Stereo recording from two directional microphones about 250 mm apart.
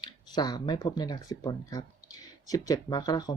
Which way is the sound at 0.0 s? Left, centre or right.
Centre.